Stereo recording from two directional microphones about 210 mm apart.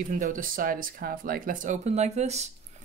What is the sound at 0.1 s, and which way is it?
Speech, 40° right (ahead or behind).